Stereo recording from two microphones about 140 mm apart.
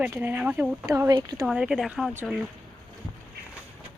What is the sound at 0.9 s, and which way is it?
Speech, 25° right (ahead or behind).